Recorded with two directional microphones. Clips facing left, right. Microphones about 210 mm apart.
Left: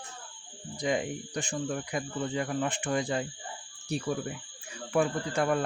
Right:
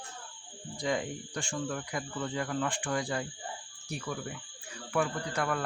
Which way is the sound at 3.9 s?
30° left (ahead or behind).